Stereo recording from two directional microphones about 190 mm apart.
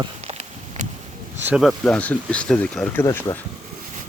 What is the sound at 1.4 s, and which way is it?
Speech, 5° right (ahead or behind).